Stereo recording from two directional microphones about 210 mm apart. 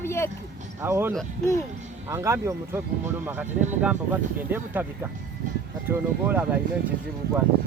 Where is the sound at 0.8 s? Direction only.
10° right (ahead or behind).